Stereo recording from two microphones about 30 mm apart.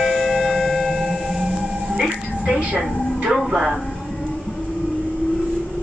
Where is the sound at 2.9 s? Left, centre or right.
Left.